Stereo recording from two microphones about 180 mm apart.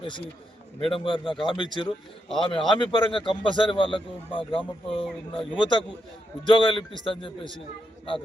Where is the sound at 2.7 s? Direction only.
25° left (ahead or behind).